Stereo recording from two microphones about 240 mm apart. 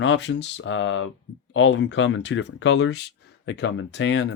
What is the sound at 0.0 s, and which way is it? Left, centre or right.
Speech, left.